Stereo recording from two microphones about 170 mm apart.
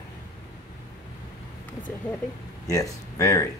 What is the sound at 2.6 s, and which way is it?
Speech, 20° left (ahead or behind).